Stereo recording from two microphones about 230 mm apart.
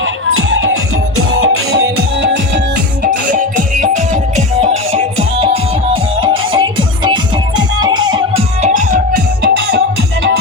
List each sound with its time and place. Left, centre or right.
0.0 s music: right
1.8 s music: right
3.0 s music: right; by 8.2 s centre
9.1 s music: right